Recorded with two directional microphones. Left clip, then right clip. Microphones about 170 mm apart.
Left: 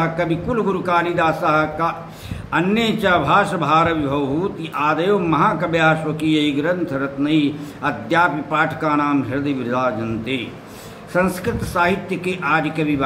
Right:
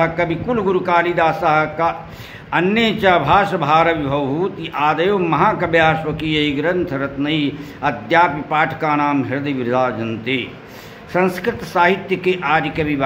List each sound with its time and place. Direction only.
0.0 s a man's voice: 50° right (ahead or behind)